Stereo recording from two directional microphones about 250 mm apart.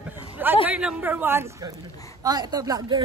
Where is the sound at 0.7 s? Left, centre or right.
Centre.